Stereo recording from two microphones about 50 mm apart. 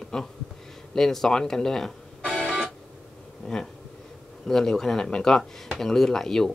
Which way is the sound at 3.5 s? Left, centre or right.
Centre.